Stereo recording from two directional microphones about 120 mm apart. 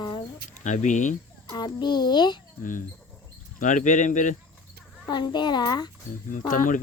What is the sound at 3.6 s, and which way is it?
Speech, 90° left.